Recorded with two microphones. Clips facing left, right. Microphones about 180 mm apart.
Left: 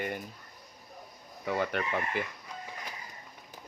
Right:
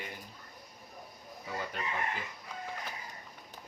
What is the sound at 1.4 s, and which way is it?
Chicken, 70° left (ahead or behind).